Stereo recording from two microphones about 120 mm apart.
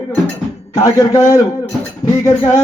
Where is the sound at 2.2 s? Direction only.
25° left (ahead or behind).